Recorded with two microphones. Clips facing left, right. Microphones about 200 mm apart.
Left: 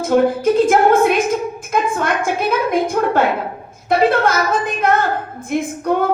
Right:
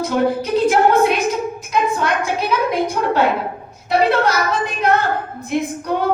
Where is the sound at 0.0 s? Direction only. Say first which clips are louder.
Left 4 dB; 50° left (ahead or behind).